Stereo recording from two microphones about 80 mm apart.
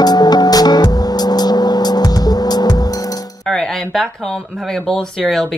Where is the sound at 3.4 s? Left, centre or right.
Centre.